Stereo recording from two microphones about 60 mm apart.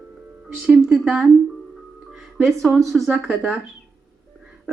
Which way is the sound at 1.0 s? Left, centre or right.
Centre.